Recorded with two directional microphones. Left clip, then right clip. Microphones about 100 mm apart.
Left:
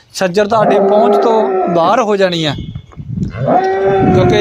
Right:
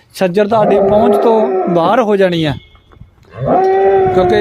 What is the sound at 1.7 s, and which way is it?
Speech, 75° right (ahead or behind).